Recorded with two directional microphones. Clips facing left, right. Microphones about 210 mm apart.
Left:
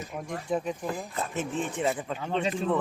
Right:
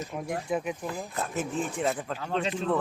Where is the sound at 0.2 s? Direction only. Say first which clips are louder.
Even; 10° right (ahead or behind).